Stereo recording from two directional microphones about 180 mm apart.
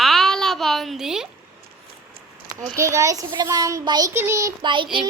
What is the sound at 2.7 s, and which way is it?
A child's voice, 15° right (ahead or behind).